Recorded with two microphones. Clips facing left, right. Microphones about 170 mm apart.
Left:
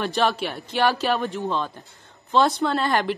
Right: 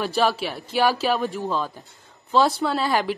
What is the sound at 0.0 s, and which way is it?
Speech, centre (ahead or behind).